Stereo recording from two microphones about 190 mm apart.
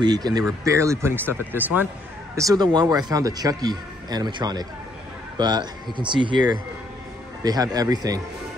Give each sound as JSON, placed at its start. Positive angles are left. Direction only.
{"t": 0.0, "sound": "a man's voice", "side_deg": -20}
{"t": 2.3, "sound": "a man's voice", "side_deg": -20}